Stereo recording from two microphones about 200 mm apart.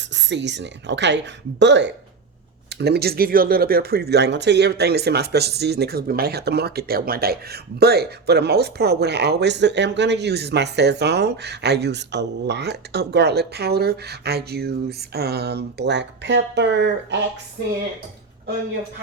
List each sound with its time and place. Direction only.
0.1 s speech: 60° right (ahead or behind)